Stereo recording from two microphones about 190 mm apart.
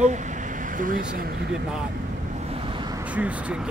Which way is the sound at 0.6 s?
45° right (ahead or behind).